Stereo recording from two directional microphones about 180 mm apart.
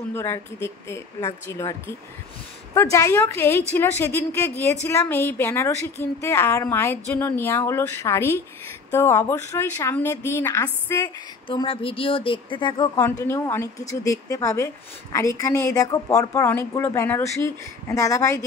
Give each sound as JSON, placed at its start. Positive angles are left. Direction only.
{"t": 0.1, "sound": "speech", "side_deg": 15}
{"t": 11.4, "sound": "speech", "side_deg": 30}
{"t": 12.9, "sound": "speech", "side_deg": 15}